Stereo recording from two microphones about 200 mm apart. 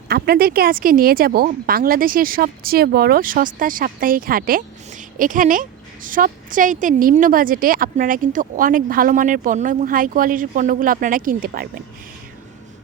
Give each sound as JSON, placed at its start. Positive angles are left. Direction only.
{"t": 0.1, "sound": "speech", "side_deg": -50}